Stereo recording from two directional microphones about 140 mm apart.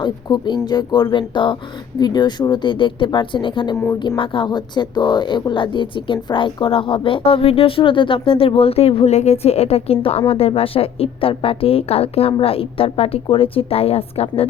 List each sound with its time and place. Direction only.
0.0 s a woman's voice: 30° left (ahead or behind)